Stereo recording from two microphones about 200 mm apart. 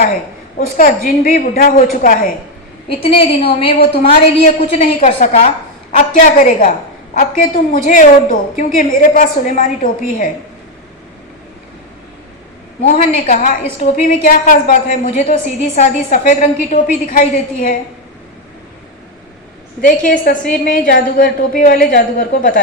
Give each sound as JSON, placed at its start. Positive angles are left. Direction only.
{"t": 0.8, "sound": "a woman's voice", "side_deg": 45}
{"t": 3.0, "sound": "a woman's voice", "side_deg": 30}
{"t": 12.8, "sound": "a woman's voice", "side_deg": 35}
{"t": 19.8, "sound": "a woman's voice", "side_deg": 45}